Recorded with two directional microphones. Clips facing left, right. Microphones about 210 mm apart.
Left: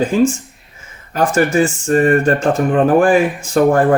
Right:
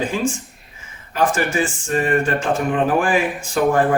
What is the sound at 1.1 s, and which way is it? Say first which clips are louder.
Speech: left 5 dB; 45° left (ahead or behind).